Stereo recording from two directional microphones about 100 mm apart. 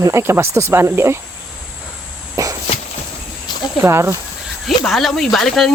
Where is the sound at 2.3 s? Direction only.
30° right (ahead or behind).